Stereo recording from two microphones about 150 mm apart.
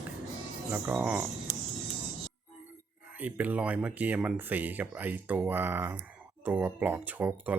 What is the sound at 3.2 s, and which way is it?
Speech, 10° right (ahead or behind).